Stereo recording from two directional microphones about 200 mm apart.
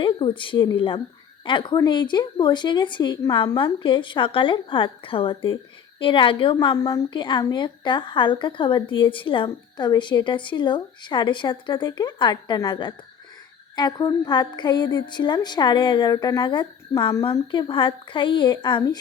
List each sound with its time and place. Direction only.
0.0 s a woman's voice: 25° left (ahead or behind)